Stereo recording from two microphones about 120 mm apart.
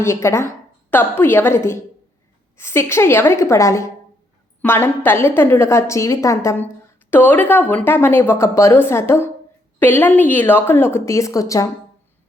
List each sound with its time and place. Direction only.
0.0 s a woman's voice: 25° left (ahead or behind)